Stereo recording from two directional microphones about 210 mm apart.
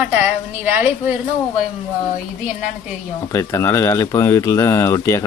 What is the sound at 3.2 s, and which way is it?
Speech, 15° left (ahead or behind).